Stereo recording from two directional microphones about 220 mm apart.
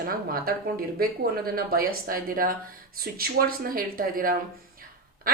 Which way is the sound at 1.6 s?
40° right (ahead or behind).